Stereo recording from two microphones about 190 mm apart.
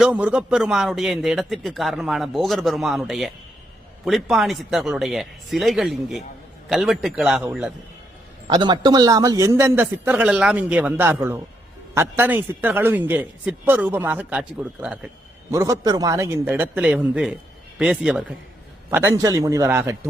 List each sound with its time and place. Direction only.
0.0 s a man's voice: 5° right (ahead or behind)
8.4 s a man's voice: 20° right (ahead or behind)